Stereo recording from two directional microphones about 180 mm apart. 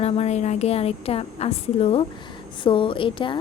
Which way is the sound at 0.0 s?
35° left (ahead or behind).